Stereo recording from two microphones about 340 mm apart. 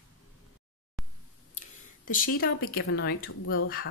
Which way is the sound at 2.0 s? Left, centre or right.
Left.